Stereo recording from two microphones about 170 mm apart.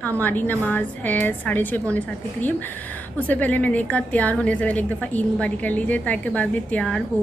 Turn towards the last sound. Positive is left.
turn(degrees=5)  # may be behind; listen again after turning